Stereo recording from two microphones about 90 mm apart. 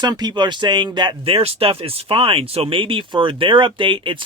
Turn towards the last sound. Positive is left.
turn(degrees=-65)  # may be behind; listen again after turning